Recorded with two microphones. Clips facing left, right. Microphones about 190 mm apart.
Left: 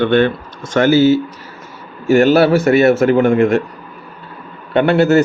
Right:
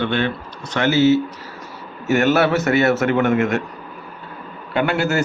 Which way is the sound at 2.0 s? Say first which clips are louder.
Left 6 dB; 30° left (ahead or behind).